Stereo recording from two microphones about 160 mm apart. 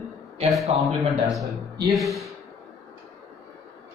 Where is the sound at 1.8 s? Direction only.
Centre (ahead or behind).